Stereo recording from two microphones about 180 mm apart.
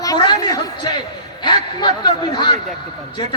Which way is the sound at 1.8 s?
25° left (ahead or behind).